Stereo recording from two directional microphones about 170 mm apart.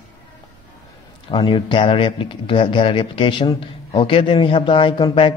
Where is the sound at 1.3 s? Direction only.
30° left (ahead or behind).